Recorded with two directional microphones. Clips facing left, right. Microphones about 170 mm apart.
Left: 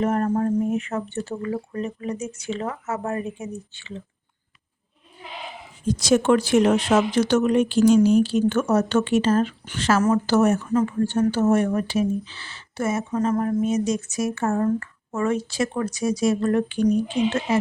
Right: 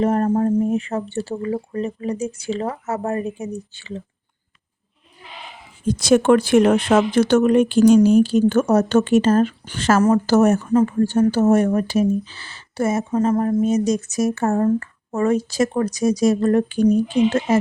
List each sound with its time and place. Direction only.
0.0 s speech: 35° right (ahead or behind)
5.8 s speech: 55° right (ahead or behind); by 17.6 s 40° right (ahead or behind)